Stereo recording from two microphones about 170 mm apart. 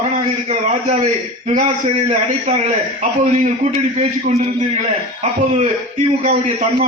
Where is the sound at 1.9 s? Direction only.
40° right (ahead or behind).